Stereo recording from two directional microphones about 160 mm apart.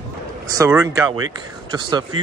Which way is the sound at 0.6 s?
20° right (ahead or behind).